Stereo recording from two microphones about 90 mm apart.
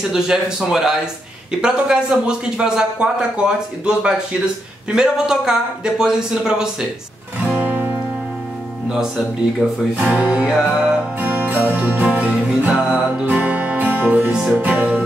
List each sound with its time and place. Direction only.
0.1 s speech: 5° right (ahead or behind)
7.4 s music: 20° right (ahead or behind)
8.8 s speech: 5° right (ahead or behind)
10.5 s music: 10° right (ahead or behind)
14.5 s speech: 20° right (ahead or behind)
14.8 s music: 15° right (ahead or behind)